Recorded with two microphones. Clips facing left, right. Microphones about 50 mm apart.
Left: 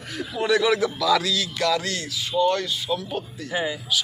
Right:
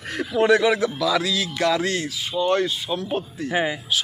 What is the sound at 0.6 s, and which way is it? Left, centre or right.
A man's voice, centre.